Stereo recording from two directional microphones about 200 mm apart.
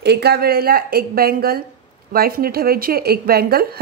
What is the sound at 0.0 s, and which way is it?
A woman's voice, 55° right (ahead or behind).